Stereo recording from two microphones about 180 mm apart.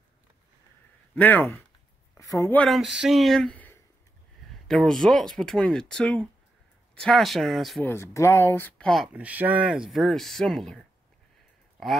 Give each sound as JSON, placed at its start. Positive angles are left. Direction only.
{"t": 1.1, "sound": "speech", "side_deg": 10}
{"t": 2.6, "sound": "speech", "side_deg": 0}
{"t": 7.9, "sound": "speech", "side_deg": 15}